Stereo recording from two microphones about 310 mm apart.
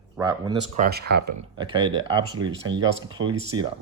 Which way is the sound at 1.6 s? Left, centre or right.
Centre.